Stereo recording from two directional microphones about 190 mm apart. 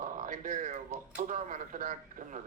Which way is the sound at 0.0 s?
45° right (ahead or behind).